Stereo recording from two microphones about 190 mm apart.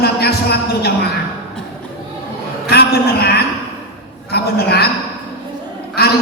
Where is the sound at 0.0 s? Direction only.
55° left (ahead or behind).